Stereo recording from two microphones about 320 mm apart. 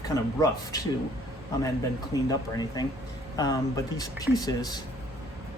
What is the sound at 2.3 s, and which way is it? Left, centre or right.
Speech, centre.